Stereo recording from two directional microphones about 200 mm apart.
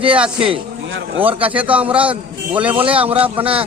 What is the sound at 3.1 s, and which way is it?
Speech, 25° right (ahead or behind).